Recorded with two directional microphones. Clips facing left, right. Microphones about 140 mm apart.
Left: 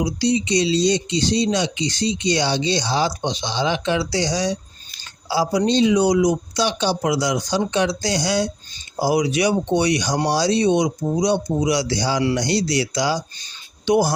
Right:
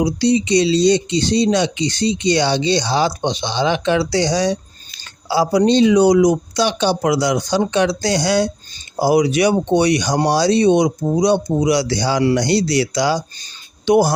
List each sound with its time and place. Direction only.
0.0 s speech: 60° right (ahead or behind)